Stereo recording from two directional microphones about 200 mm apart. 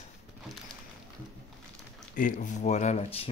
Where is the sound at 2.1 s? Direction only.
40° left (ahead or behind).